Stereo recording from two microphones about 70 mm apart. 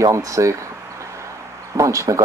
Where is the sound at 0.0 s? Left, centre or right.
Right.